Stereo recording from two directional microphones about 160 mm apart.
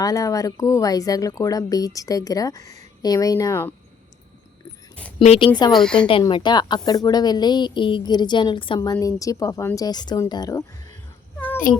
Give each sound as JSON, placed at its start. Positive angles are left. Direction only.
{"t": 0.0, "sound": "a woman's voice", "side_deg": 20}
{"t": 5.2, "sound": "speech", "side_deg": 40}
{"t": 5.7, "sound": "a woman's voice", "side_deg": 5}
{"t": 6.2, "sound": "a woman's voice", "side_deg": 25}
{"t": 11.7, "sound": "a child's voice", "side_deg": 60}